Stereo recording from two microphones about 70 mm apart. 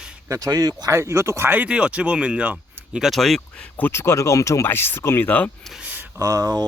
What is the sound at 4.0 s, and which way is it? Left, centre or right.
Speech, left.